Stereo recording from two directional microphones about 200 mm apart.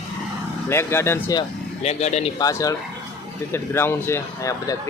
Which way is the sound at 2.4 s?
15° left (ahead or behind).